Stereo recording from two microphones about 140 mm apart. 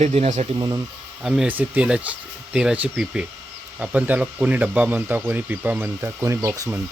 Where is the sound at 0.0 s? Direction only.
50° right (ahead or behind).